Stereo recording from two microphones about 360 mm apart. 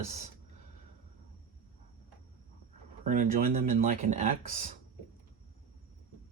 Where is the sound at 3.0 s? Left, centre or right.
Right.